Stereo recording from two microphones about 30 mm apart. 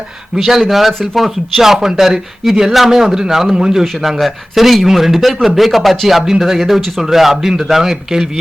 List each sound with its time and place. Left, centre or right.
0.3 s a man's voice: centre
1.6 s a man's voice: centre
4.2 s a man's voice: centre